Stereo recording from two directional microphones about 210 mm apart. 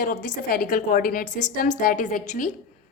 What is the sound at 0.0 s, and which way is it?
A woman's voice, 40° left (ahead or behind).